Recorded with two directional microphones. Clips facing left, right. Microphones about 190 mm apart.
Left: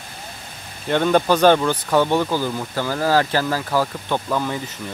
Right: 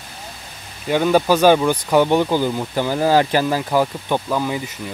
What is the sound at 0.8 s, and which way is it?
Speech, 5° right (ahead or behind).